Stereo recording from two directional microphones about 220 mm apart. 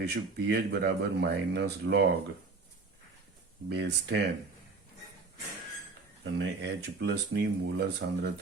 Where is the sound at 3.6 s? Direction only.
50° right (ahead or behind).